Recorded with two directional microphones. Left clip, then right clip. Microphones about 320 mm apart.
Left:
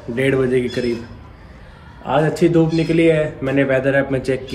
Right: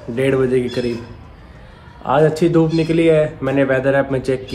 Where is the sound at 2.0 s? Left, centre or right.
Centre.